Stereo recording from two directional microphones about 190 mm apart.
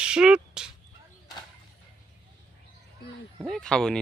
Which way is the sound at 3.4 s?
Centre (ahead or behind).